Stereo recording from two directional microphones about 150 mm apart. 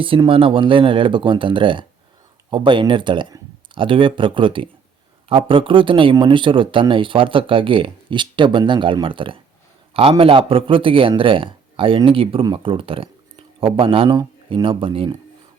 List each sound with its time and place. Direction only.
0.0 s speech: 35° right (ahead or behind)